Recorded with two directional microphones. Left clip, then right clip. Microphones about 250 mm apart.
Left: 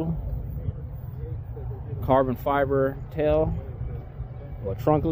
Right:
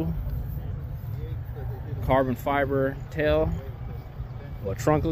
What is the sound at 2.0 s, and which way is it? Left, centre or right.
Speech, left.